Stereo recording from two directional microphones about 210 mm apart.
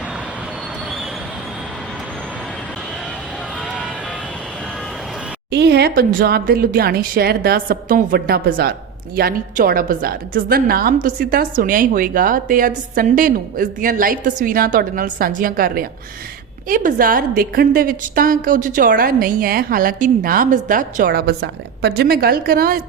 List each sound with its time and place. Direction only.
5.5 s a woman's voice: 50° right (ahead or behind)